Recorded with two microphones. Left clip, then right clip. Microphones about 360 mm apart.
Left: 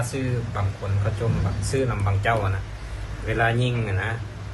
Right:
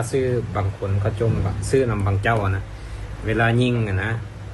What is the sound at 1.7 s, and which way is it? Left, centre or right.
Speech, right.